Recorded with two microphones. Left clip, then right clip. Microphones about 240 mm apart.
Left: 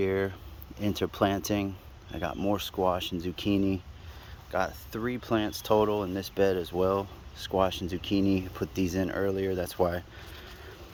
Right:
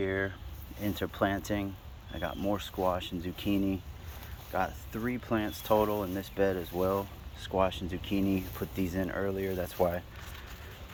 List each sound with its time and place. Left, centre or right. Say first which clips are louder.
0.0 s speech: left 4 dB; left
4.5 s speech: left 2 dB; left